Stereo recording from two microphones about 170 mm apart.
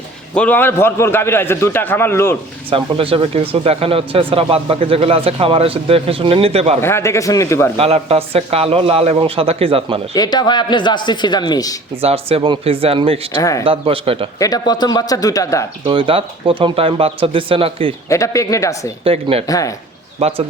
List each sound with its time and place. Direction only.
0.3 s a man's voice: 10° left (ahead or behind)
2.6 s speech: 35° right (ahead or behind)
6.8 s a man's voice: 15° left (ahead or behind)
7.8 s speech: 35° right (ahead or behind)
10.2 s speech: 25° left (ahead or behind)
12.0 s speech: 35° right (ahead or behind)
14.3 s speech: 20° left (ahead or behind)
15.9 s speech: 30° right (ahead or behind)
18.1 s speech: 20° left (ahead or behind)
19.0 s speech: 35° right (ahead or behind)
19.5 s speech: 20° left (ahead or behind)
20.1 s a man's voice: 35° right (ahead or behind)